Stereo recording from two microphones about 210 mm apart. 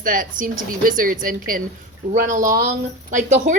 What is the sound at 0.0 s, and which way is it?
A woman's voice, 40° right (ahead or behind).